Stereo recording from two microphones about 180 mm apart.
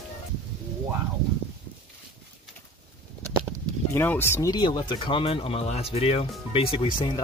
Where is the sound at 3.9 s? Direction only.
10° left (ahead or behind); by 7.2 s 30° left (ahead or behind).